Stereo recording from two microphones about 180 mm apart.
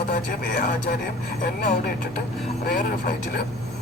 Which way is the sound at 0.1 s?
50° left (ahead or behind).